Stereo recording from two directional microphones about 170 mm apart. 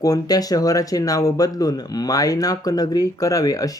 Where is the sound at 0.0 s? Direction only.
20° left (ahead or behind).